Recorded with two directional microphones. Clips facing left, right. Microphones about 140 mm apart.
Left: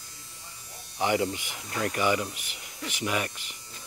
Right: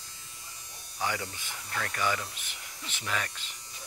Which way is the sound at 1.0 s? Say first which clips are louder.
Left 8 dB; 20° left (ahead or behind).